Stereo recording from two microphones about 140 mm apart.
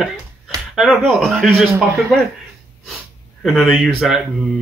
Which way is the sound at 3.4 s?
Centre (ahead or behind).